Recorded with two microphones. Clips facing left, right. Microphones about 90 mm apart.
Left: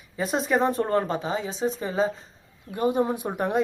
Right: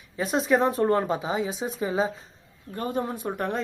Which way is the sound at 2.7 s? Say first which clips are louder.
Left 5 dB; 15° left (ahead or behind).